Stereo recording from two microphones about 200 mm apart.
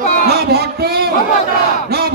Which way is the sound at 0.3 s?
55° right (ahead or behind).